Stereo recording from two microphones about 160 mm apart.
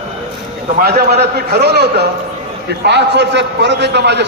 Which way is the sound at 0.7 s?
80° right.